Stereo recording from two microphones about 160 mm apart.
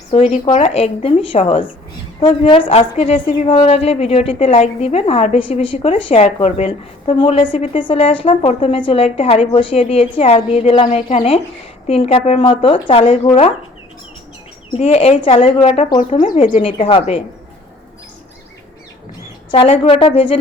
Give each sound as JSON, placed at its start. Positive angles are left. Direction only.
{"t": 0.1, "sound": "a woman's voice", "side_deg": 40}
{"t": 14.7, "sound": "a woman's voice", "side_deg": 40}
{"t": 19.5, "sound": "a woman's voice", "side_deg": 35}